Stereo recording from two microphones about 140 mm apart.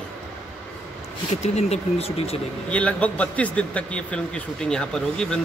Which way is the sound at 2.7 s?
10° left (ahead or behind).